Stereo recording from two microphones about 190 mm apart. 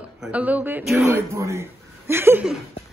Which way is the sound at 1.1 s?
15° right (ahead or behind).